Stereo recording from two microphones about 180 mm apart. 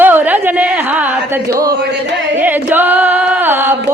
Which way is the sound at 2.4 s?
10° right (ahead or behind).